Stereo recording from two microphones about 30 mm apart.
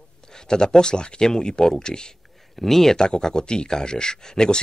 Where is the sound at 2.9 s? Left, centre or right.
Left.